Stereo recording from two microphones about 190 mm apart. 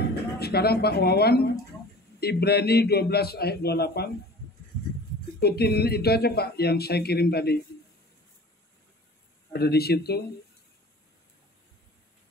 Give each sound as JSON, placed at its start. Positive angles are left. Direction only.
{"t": 0.1, "sound": "speech", "side_deg": 55}
{"t": 5.4, "sound": "speech", "side_deg": 55}
{"t": 9.5, "sound": "speech", "side_deg": 55}